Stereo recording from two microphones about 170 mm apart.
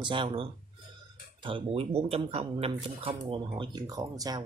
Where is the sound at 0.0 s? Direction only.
30° right (ahead or behind).